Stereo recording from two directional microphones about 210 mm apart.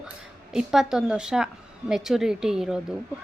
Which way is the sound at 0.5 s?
Centre (ahead or behind).